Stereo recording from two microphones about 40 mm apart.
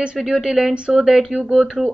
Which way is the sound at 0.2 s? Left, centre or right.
Centre.